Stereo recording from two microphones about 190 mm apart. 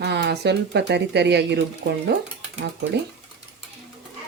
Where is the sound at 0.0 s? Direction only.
60° right (ahead or behind).